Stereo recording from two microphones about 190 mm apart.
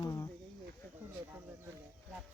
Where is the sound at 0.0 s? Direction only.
15° left (ahead or behind).